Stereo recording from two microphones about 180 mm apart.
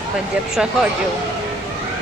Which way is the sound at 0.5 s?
Centre (ahead or behind).